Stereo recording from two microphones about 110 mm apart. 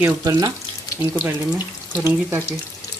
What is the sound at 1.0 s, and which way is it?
Speech, 15° right (ahead or behind).